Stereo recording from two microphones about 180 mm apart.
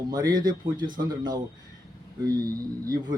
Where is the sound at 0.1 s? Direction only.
20° right (ahead or behind).